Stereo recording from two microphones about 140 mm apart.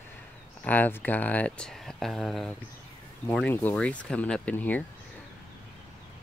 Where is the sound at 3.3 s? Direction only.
10° left (ahead or behind).